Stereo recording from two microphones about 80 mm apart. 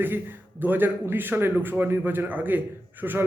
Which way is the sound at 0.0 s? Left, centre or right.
Right.